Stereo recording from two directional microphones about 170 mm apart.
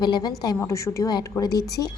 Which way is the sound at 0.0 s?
25° left (ahead or behind).